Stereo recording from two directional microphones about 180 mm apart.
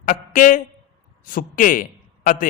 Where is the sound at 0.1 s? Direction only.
50° left (ahead or behind).